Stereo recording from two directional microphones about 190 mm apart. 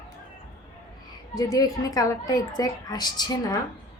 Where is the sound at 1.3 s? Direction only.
20° left (ahead or behind).